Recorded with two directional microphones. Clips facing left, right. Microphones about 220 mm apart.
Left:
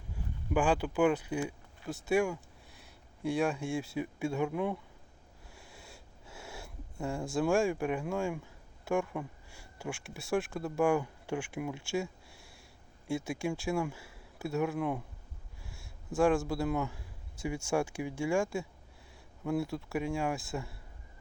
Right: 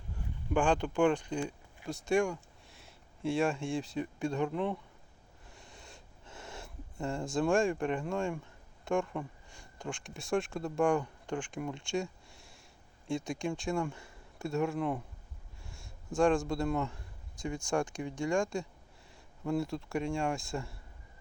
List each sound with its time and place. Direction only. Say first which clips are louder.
0.5 s speech: even; 5° left (ahead or behind)
5.5 s a sound: even; centre (ahead or behind)
7.3 s a man's voice: even; 5° left (ahead or behind)